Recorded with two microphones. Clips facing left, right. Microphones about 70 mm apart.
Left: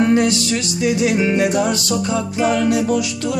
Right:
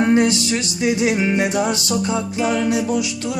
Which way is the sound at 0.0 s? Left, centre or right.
Right.